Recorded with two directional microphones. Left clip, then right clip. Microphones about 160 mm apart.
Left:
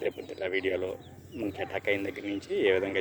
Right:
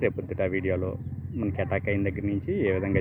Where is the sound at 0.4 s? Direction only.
15° left (ahead or behind).